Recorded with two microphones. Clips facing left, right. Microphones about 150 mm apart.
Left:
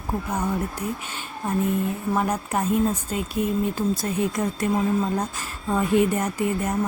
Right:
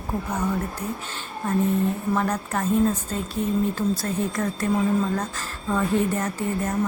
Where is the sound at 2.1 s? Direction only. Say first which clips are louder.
Left 1 dB; 10° left (ahead or behind).